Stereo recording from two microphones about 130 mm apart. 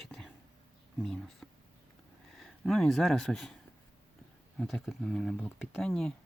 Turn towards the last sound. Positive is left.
turn(degrees=5)  # may be behind; listen again after turning